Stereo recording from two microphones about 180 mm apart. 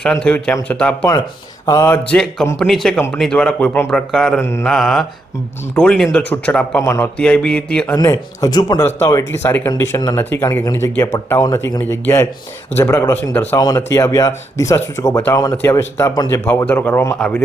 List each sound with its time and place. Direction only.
0.0 s a man's voice: 5° left (ahead or behind)
4.4 s speech: 15° left (ahead or behind)
4.6 s a man's voice: centre (ahead or behind)
8.4 s speech: 20° left (ahead or behind)